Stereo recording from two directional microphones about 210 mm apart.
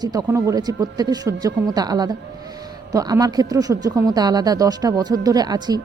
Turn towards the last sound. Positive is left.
turn(degrees=-20)  # may be behind; listen again after turning